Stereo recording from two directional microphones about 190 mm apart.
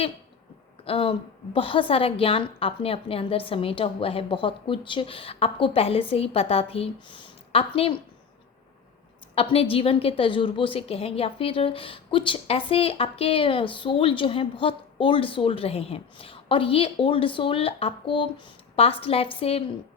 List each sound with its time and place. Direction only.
0.9 s a woman's voice: 30° left (ahead or behind)
9.3 s a woman's voice: 30° left (ahead or behind)